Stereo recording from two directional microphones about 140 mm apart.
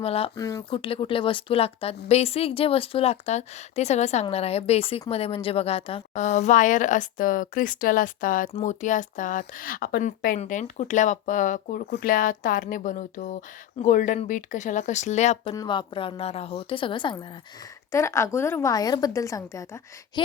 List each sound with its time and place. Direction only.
0.0 s a woman's voice: 45° left (ahead or behind)
0.3 s a woman's voice: 25° left (ahead or behind)
0.7 s a woman's voice: 40° left (ahead or behind)
6.2 s speech: 55° left (ahead or behind); by 8.4 s 75° left (ahead or behind)
8.5 s speech: 60° left (ahead or behind); by 10.3 s 90° left
10.3 s speech: 60° left (ahead or behind)
15.5 s a woman's voice: 35° left (ahead or behind)
17.9 s a woman's voice: 20° left (ahead or behind)